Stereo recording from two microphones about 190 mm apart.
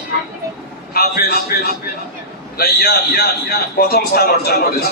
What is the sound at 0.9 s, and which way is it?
Speech, 55° left (ahead or behind).